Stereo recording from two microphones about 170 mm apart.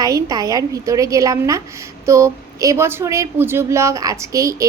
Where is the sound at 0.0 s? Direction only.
20° right (ahead or behind).